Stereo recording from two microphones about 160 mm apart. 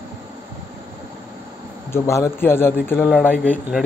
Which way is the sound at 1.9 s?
15° left (ahead or behind).